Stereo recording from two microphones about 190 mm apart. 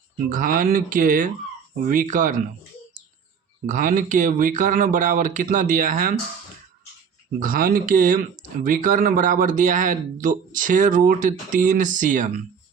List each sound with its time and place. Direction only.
0.3 s speech: 45° right (ahead or behind)
3.7 s speech: 45° right (ahead or behind)
7.3 s speech: 45° right (ahead or behind)